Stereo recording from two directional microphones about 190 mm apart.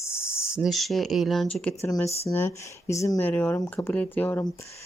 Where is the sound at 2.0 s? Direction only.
35° left (ahead or behind).